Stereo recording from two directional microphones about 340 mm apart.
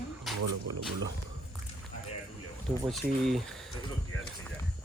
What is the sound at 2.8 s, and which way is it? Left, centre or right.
Speech, centre.